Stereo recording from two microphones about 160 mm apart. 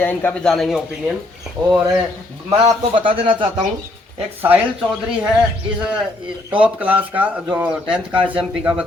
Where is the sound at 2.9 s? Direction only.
35° right (ahead or behind).